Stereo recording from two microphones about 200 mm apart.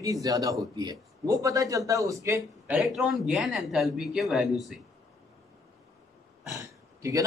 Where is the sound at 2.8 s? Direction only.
Centre (ahead or behind).